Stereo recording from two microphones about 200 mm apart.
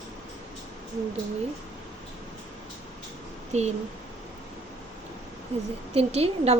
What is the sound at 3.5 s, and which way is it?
Speech, 35° right (ahead or behind).